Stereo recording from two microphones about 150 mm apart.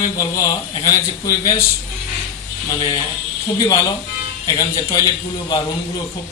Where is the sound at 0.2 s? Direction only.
25° left (ahead or behind).